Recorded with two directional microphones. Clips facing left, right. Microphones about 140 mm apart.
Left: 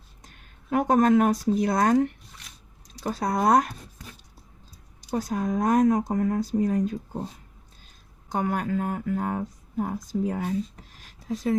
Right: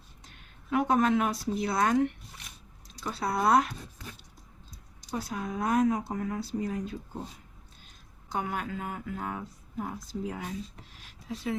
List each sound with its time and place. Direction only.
0.3 s speech: 45° left (ahead or behind)
5.1 s speech: 45° left (ahead or behind)
8.3 s speech: 45° left (ahead or behind)